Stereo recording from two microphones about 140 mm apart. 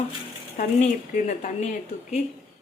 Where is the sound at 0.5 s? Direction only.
65° left (ahead or behind).